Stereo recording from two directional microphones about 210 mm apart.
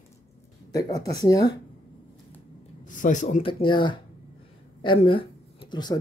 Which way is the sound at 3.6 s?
25° left (ahead or behind).